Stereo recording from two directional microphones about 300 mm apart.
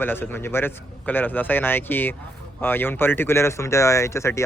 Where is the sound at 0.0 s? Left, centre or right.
Centre.